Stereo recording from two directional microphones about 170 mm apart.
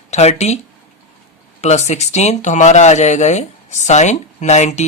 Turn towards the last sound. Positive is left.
turn(degrees=45)  # may be behind; listen again after turning